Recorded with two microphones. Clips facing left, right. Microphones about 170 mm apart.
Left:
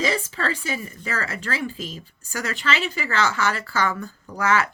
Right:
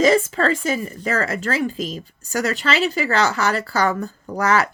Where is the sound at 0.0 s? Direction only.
45° right (ahead or behind).